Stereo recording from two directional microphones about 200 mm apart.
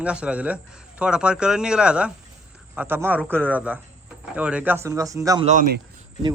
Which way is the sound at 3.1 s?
5° left (ahead or behind).